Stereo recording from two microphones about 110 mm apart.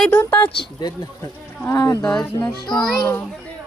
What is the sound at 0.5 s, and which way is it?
Speech, 45° left (ahead or behind).